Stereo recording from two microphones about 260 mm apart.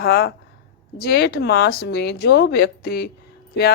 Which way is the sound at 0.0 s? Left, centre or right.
Left.